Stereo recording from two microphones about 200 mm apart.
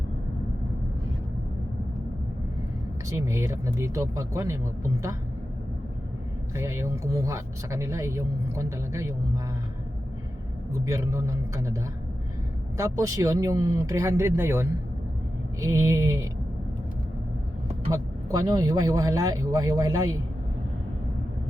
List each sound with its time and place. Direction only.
3.1 s speech: 15° right (ahead or behind)
6.6 s speech: 15° right (ahead or behind)
10.7 s speech: 15° right (ahead or behind)
17.9 s speech: 20° right (ahead or behind)